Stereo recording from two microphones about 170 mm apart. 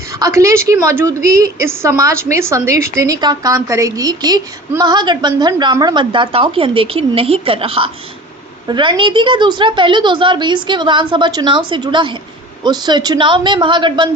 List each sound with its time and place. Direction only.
0.2 s a woman's voice: 20° right (ahead or behind)